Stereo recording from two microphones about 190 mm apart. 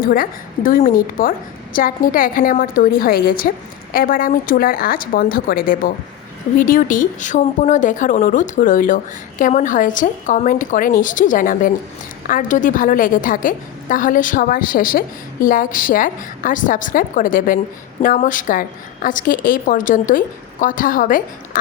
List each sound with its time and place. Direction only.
0.0 s a woman's voice: 50° left (ahead or behind)